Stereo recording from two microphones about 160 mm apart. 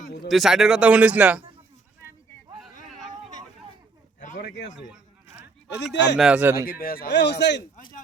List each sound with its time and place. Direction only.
0.3 s speech: centre (ahead or behind)
4.4 s a man's voice: 90° left
5.7 s speech: 90° left
6.1 s speech: 5° right (ahead or behind)
6.7 s a man's voice: 70° left (ahead or behind); by 7.9 s 90° left